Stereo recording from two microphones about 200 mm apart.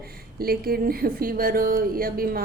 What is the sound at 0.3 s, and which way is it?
A woman's voice, 50° right (ahead or behind).